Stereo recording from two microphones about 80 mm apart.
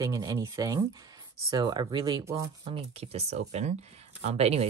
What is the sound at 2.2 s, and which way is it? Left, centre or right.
Speech, right.